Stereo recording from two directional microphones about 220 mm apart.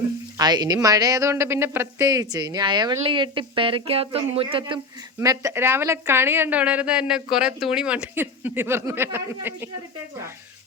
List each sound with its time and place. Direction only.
0.3 s a woman's voice: 20° right (ahead or behind)
5.2 s a woman's voice: 15° right (ahead or behind)